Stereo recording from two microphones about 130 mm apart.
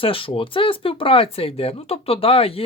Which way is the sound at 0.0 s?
45° left (ahead or behind).